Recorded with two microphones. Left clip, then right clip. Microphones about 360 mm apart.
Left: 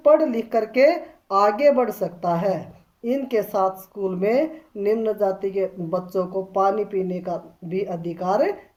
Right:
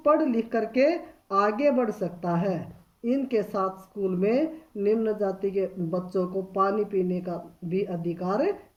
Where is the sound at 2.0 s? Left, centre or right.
Left.